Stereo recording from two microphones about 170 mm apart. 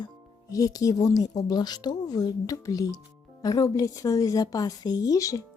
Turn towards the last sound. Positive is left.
turn(degrees=20)  # may be behind; listen again after turning